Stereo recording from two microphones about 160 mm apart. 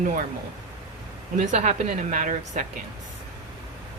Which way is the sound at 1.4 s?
50° right (ahead or behind).